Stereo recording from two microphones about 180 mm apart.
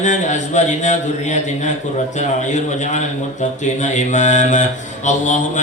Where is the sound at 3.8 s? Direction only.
40° left (ahead or behind).